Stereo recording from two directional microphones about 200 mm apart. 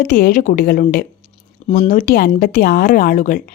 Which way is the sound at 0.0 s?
45° left (ahead or behind).